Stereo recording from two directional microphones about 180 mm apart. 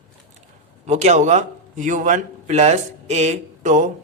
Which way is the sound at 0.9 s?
40° right (ahead or behind).